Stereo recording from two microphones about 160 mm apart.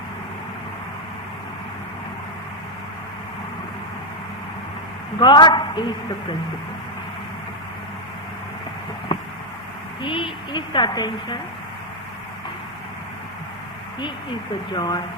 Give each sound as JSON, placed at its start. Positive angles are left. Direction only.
{"t": 5.2, "sound": "a woman's voice", "side_deg": 30}
{"t": 9.1, "sound": "a sound", "side_deg": 35}
{"t": 10.0, "sound": "a woman's voice", "side_deg": 30}
{"t": 14.0, "sound": "a woman's voice", "side_deg": 30}